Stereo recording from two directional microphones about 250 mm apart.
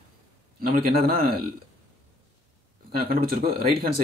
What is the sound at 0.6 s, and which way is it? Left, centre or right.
Speech, right.